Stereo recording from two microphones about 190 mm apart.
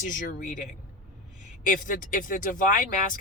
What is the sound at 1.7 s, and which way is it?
Speech, 45° left (ahead or behind).